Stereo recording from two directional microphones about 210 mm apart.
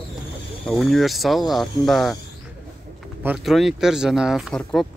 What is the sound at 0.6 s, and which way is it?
Speech, centre (ahead or behind).